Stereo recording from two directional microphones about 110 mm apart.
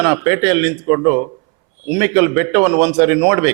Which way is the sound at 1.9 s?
15° right (ahead or behind).